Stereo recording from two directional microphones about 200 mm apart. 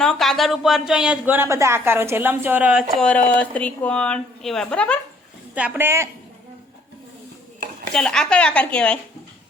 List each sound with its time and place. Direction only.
0.0 s speech: centre (ahead or behind)
2.9 s speech: 5° left (ahead or behind)
5.5 s speech: 10° right (ahead or behind)
7.9 s speech: 5° left (ahead or behind)